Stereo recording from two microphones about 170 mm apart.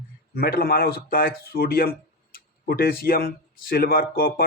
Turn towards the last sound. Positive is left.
turn(degrees=60)  # may be behind; listen again after turning